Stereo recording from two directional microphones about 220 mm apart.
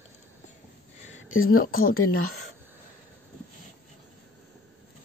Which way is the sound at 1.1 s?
65° left (ahead or behind).